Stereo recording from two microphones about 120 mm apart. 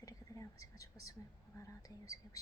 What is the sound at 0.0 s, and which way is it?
Whispering, 30° left (ahead or behind).